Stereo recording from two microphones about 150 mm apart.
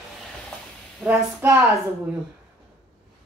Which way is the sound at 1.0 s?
15° right (ahead or behind).